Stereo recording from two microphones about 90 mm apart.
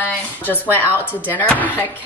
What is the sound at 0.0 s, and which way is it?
Speech, 20° left (ahead or behind).